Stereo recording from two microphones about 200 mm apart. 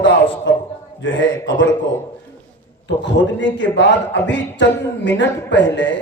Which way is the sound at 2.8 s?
65° left (ahead or behind).